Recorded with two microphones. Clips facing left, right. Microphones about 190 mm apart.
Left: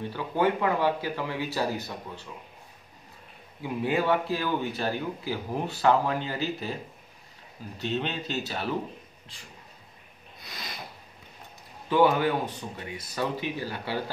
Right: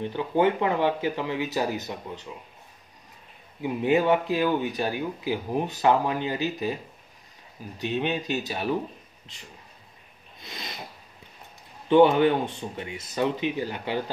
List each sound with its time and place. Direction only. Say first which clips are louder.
0.0 s speech: right 3 dB; 20° right (ahead or behind)
3.6 s speech: right 4 dB; 20° right (ahead or behind)
7.8 s speech: right 3 dB; 15° right (ahead or behind)
10.4 s a sound: right 3 dB; 25° right (ahead or behind)
11.9 s speech: right 5 dB; 25° right (ahead or behind)